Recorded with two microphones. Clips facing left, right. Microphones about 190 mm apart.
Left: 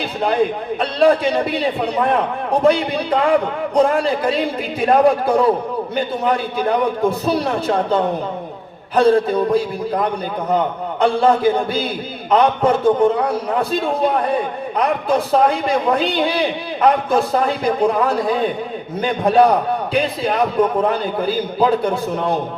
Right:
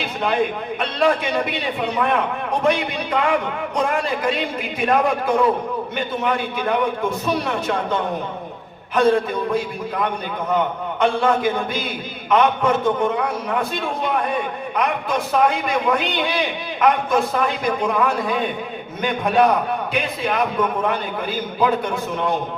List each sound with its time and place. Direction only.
0.0 s a man's voice: 35° left (ahead or behind)